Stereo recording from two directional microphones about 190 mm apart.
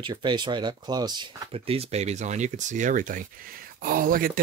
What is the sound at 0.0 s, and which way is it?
Speech, 25° right (ahead or behind).